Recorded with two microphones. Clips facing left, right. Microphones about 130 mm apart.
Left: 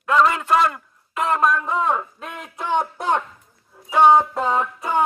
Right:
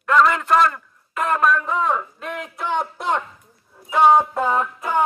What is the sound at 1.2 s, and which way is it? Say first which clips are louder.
Speech: even; 20° left (ahead or behind).